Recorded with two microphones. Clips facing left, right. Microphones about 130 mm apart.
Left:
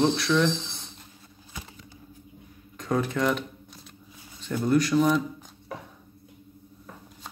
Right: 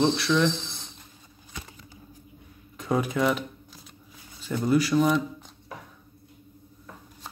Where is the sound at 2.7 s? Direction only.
10° right (ahead or behind).